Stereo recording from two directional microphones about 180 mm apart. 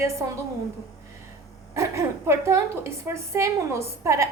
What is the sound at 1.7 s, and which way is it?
A woman's voice, 15° right (ahead or behind).